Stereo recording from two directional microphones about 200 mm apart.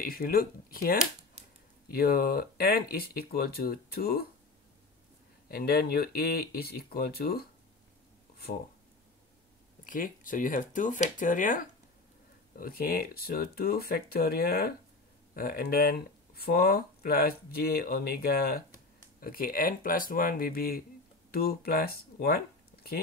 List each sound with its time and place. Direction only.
0.0 s speech: 50° left (ahead or behind)
1.4 s a sound: 30° right (ahead or behind)
1.9 s speech: 50° left (ahead or behind)
5.5 s speech: 50° left (ahead or behind)
9.8 s speech: 40° left (ahead or behind)